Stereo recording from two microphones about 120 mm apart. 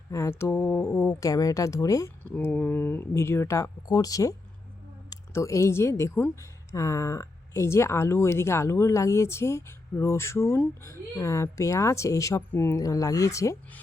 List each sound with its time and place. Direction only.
0.1 s a sound: 25° left (ahead or behind)
1.2 s speech: 30° left (ahead or behind)
2.2 s speech: 10° left (ahead or behind)